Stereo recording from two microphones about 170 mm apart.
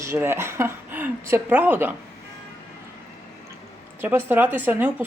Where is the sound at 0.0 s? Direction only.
15° right (ahead or behind).